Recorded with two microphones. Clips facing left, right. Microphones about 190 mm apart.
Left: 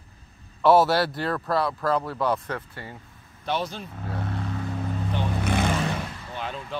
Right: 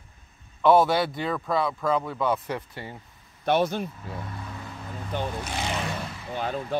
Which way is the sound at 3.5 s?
55° right (ahead or behind).